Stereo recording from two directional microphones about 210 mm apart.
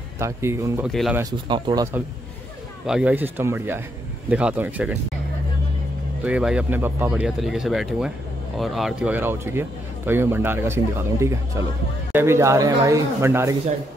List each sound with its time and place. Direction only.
0.2 s speech: 15° right (ahead or behind)
0.8 s speech: centre (ahead or behind)
1.2 s speech: 20° right (ahead or behind)
6.2 s speech: 5° right (ahead or behind)